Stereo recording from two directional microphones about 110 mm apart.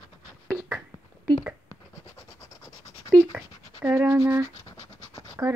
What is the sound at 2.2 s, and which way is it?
Scratch, 25° left (ahead or behind).